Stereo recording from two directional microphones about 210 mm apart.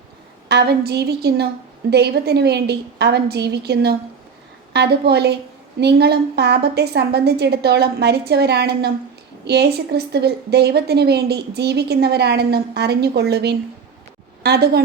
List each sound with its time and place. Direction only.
0.4 s a woman's voice: 50° right (ahead or behind)